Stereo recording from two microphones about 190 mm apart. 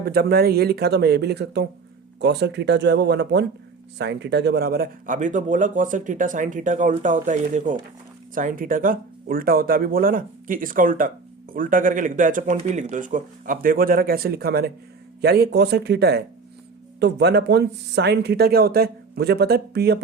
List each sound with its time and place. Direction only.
0.0 s speech: 55° right (ahead or behind)